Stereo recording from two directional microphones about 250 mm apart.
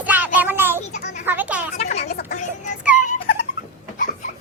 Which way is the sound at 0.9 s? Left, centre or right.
Left.